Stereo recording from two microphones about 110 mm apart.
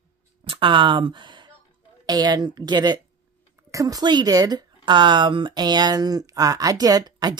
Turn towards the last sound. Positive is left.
turn(degrees=-35)  # may be behind; listen again after turning